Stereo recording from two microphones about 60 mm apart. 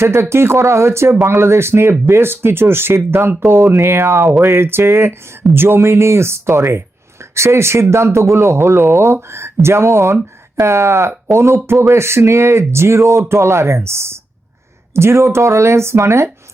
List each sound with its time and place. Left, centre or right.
0.0 s speech: right